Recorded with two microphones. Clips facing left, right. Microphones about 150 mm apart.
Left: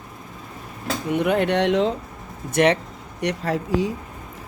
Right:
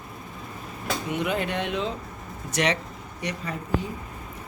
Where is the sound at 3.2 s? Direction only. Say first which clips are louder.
Left 8 dB; 85° left.